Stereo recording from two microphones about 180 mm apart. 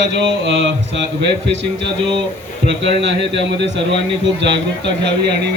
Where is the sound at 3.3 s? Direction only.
80° right.